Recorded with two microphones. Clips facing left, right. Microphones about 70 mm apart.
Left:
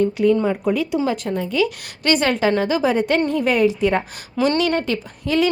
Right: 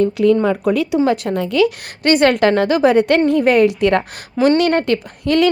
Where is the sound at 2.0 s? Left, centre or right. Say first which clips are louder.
Right 6 dB; right.